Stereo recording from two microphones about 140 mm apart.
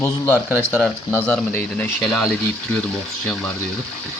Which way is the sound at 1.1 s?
10° left (ahead or behind).